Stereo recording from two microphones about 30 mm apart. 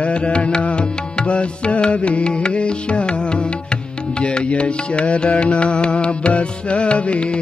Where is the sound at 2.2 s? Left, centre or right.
Left.